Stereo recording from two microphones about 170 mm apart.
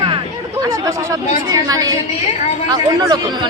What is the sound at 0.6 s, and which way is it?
Speech, 15° right (ahead or behind).